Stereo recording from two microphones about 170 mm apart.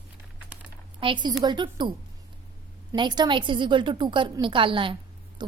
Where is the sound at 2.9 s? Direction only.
25° right (ahead or behind).